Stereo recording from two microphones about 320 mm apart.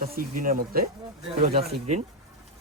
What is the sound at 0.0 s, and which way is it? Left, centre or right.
Speech, right.